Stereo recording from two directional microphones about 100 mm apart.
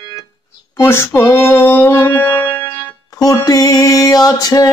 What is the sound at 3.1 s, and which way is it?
Music, 40° left (ahead or behind).